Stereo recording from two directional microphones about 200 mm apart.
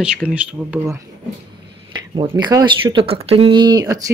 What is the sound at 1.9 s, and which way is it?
Speech, 20° right (ahead or behind).